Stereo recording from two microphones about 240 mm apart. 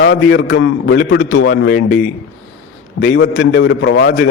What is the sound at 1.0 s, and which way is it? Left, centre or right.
Speech, left.